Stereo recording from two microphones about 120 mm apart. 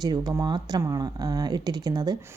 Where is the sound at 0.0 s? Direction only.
35° right (ahead or behind).